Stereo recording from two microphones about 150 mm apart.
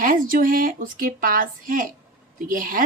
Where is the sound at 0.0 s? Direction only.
65° right (ahead or behind).